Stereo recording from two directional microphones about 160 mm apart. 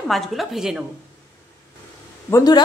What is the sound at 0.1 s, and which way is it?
Speech, centre (ahead or behind).